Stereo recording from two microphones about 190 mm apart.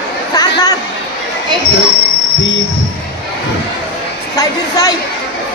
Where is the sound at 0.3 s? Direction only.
20° left (ahead or behind).